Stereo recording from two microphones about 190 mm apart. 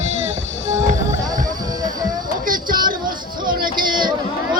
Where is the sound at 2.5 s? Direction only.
45° right (ahead or behind).